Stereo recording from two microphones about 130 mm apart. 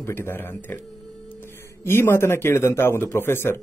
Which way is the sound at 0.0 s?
15° left (ahead or behind).